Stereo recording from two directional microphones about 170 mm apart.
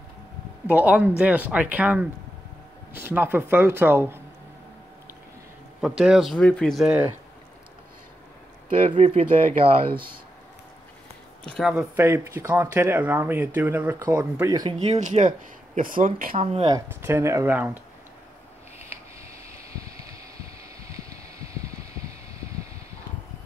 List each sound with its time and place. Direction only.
0.7 s speech: 10° right (ahead or behind)
5.8 s speech: 5° right (ahead or behind)
8.9 s speech: 35° right (ahead or behind)
11.4 s speech: 5° left (ahead or behind)
11.7 s speech: 15° right (ahead or behind)
14.9 s speech: 45° right (ahead or behind)
16.6 s speech: 15° right (ahead or behind)